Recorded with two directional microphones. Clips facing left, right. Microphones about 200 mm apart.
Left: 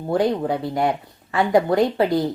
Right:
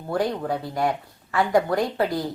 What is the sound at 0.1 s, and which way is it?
Speech, 20° left (ahead or behind).